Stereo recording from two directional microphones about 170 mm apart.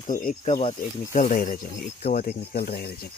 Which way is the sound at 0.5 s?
35° left (ahead or behind).